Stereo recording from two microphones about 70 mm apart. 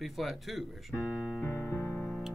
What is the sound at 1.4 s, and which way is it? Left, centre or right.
Keyboard, left.